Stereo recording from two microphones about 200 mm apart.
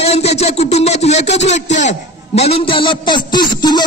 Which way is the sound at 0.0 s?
30° left (ahead or behind).